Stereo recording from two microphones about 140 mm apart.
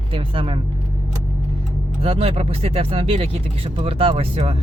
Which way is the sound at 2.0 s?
45° right (ahead or behind).